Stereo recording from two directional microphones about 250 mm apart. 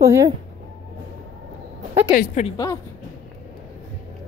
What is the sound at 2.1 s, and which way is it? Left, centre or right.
Speech, left.